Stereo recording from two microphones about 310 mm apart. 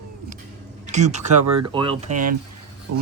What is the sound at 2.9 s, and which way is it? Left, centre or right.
Speech, right.